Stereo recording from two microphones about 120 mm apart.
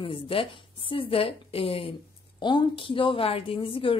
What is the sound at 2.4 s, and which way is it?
A woman's voice, 40° left (ahead or behind).